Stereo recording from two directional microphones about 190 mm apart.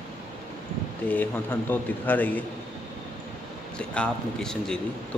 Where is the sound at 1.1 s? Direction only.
10° left (ahead or behind).